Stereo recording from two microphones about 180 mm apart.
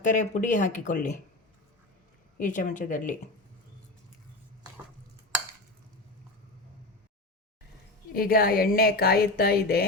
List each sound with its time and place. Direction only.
0.0 s speech: 45° left (ahead or behind)
2.4 s speech: 45° left (ahead or behind)
8.1 s speech: 55° left (ahead or behind)